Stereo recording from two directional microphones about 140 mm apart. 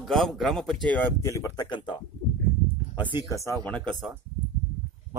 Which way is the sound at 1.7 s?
35° left (ahead or behind).